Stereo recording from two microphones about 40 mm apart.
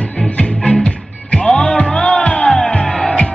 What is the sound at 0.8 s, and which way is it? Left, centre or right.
Music, left.